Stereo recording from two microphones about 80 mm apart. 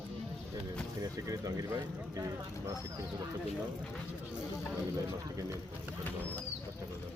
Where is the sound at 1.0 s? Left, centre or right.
Right.